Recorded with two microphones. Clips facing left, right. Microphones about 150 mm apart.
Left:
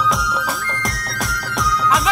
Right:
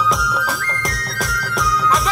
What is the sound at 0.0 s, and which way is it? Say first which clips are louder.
Music: right 1 dB; centre (ahead or behind).